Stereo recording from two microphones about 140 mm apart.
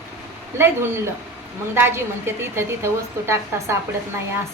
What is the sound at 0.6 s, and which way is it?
A woman's voice, 20° right (ahead or behind).